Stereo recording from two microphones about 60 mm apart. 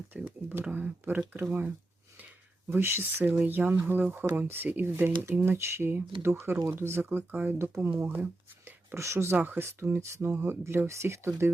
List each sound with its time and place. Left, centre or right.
0.1 s speech: right